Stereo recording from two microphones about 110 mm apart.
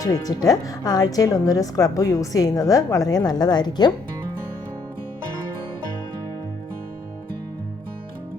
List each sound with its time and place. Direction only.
0.0 s a woman's voice: 35° left (ahead or behind)